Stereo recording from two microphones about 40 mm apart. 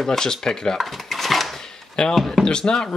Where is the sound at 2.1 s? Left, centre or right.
Centre.